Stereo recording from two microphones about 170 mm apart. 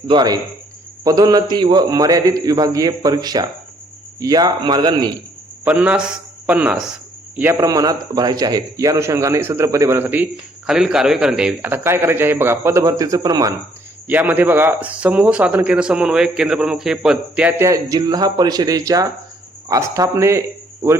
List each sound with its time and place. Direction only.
0.1 s a man's voice: 25° right (ahead or behind)
5.6 s a man's voice: 10° right (ahead or behind)
14.1 s speech: 10° right (ahead or behind)
17.6 s a man's voice: 20° right (ahead or behind)